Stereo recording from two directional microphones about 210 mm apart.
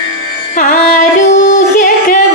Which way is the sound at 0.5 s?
40° left (ahead or behind).